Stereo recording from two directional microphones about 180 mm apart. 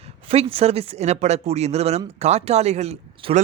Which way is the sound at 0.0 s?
35° right (ahead or behind).